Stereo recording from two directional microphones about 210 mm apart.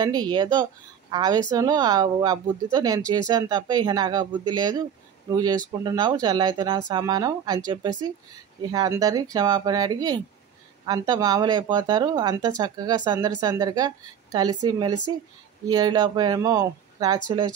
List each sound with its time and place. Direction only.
0.0 s speech: 20° right (ahead or behind)